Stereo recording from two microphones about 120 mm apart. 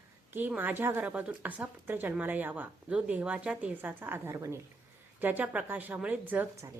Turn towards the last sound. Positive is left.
turn(degrees=-15)  # may be behind; listen again after turning